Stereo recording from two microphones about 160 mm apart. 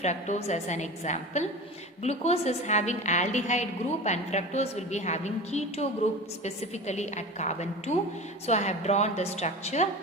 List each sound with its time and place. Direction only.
0.0 s a woman's voice: 45° left (ahead or behind)